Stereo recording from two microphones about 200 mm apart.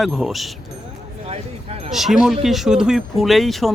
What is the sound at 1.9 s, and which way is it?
Speech, centre (ahead or behind).